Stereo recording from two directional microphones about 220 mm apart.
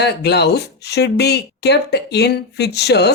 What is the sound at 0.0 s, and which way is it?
Speech, 50° left (ahead or behind).